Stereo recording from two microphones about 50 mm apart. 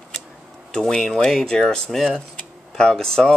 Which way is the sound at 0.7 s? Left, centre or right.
Centre.